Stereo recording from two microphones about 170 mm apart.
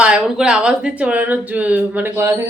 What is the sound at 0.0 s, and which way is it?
Speech, 5° right (ahead or behind).